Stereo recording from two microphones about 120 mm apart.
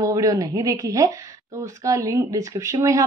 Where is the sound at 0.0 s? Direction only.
30° right (ahead or behind).